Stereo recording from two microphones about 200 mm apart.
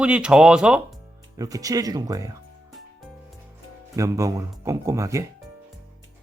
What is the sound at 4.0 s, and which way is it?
Speech, 15° right (ahead or behind).